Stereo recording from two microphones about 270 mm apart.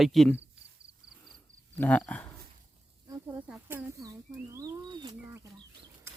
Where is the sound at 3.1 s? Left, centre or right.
Centre.